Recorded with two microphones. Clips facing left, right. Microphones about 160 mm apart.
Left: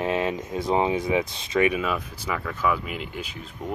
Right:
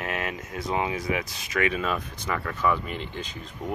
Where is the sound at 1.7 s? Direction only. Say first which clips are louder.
Left 2 dB; 5° left (ahead or behind).